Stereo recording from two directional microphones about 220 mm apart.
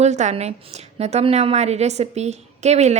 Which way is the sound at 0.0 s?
30° right (ahead or behind).